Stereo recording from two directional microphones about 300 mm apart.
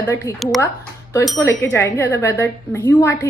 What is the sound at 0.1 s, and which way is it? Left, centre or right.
Speech, centre.